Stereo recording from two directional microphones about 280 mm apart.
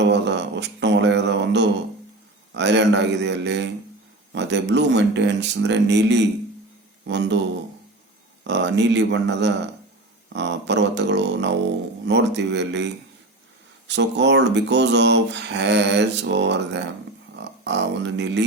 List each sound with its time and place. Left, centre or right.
0.1 s mantra: right
2.5 s a man's voice: right
8.4 s speech: right